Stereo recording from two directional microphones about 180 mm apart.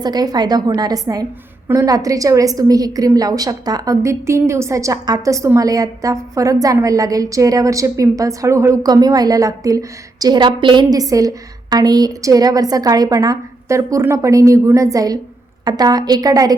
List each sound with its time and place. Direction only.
0.0 s a woman's voice: 20° right (ahead or behind)